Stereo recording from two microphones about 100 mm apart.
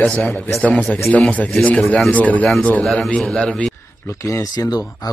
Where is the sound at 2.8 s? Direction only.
5° left (ahead or behind).